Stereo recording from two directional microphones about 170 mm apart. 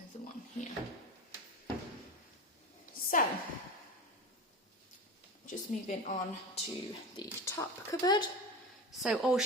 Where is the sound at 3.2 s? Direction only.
50° left (ahead or behind).